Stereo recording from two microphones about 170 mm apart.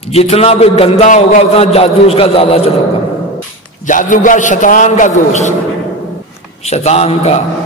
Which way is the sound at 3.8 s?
50° left (ahead or behind).